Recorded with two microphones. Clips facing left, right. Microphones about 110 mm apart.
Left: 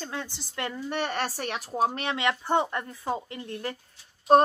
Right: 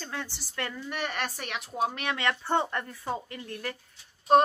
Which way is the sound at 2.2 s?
15° left (ahead or behind).